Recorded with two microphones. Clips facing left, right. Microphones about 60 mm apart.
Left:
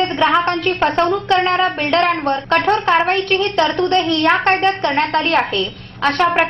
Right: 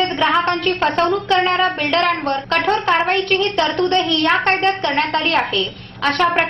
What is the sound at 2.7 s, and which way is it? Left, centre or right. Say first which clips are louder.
A woman's voice: left 1 dB; centre.